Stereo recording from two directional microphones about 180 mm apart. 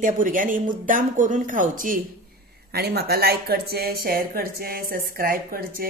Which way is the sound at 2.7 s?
60° right (ahead or behind).